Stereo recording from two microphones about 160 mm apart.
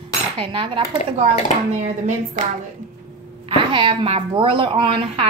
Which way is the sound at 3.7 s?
30° right (ahead or behind).